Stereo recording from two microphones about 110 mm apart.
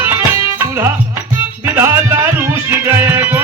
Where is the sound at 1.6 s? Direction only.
20° right (ahead or behind).